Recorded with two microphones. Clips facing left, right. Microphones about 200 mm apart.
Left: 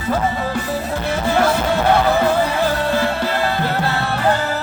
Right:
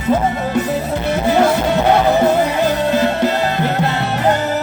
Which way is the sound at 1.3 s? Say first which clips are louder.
Right 3 dB; 20° right (ahead or behind).